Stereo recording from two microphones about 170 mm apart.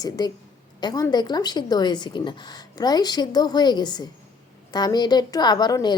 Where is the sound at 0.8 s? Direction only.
25° left (ahead or behind).